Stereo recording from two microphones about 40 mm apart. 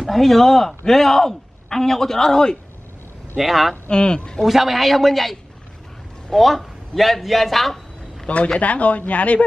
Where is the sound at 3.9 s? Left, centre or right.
Left.